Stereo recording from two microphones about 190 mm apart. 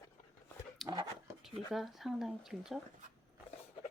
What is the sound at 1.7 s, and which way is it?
Speech, centre (ahead or behind).